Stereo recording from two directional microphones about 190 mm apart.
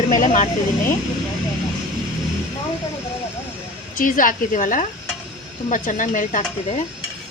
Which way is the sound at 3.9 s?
45° left (ahead or behind).